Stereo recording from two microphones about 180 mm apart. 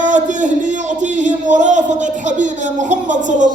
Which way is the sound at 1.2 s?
40° right (ahead or behind).